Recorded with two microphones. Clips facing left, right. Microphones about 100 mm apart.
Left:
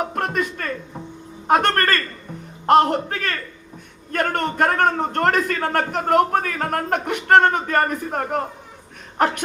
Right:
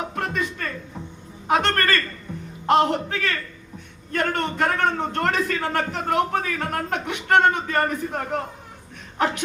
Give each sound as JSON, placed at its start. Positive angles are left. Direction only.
{"t": 0.1, "sound": "a man's voice", "side_deg": 50}